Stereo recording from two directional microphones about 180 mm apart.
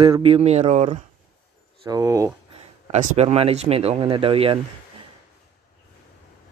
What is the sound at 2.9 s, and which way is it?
Speech, 40° right (ahead or behind).